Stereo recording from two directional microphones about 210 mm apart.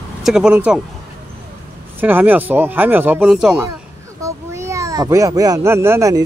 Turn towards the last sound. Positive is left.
turn(degrees=-15)  # may be behind; listen again after turning